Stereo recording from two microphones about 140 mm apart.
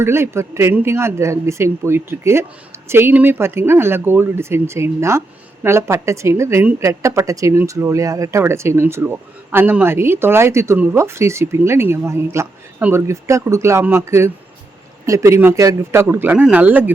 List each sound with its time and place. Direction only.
0.0 s a woman's voice: 20° right (ahead or behind)